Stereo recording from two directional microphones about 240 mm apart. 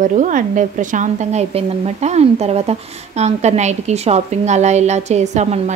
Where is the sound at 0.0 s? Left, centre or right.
Right.